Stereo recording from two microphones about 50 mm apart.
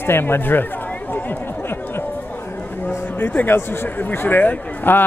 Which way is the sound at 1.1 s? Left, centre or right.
Left.